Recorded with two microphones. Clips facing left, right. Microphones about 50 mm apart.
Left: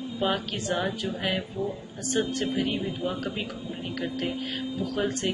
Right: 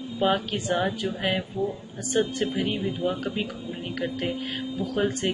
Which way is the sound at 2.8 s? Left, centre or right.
Right.